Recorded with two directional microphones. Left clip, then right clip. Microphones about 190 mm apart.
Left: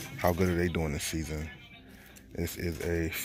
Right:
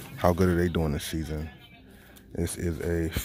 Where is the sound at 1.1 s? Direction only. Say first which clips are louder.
Right 2 dB; 5° right (ahead or behind).